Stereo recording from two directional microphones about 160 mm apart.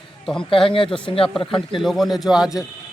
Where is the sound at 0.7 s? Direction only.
30° left (ahead or behind).